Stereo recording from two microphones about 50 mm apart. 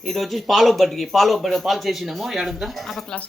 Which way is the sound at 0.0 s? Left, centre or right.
Centre.